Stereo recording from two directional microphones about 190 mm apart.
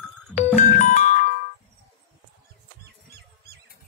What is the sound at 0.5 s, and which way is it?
Music, 40° left (ahead or behind).